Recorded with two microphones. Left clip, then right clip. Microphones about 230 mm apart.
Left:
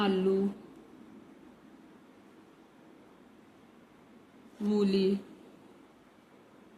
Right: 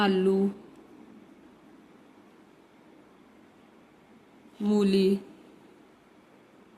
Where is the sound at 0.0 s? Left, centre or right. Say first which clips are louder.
Right 4 dB; right.